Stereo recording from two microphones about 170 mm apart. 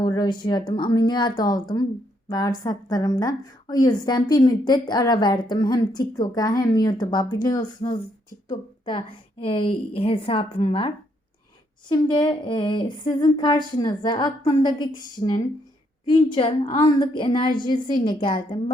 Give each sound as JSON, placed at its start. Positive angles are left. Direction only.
{"t": 0.0, "sound": "a woman's voice", "side_deg": 25}